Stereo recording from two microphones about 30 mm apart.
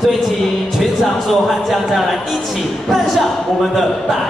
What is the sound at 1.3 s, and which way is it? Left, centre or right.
Speech, centre.